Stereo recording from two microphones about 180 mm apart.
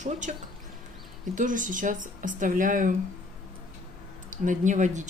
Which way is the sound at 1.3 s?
45° right (ahead or behind).